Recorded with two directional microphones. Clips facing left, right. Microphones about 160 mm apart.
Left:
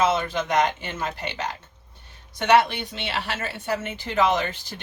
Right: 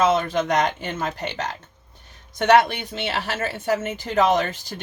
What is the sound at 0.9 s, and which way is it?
Speech, 45° right (ahead or behind).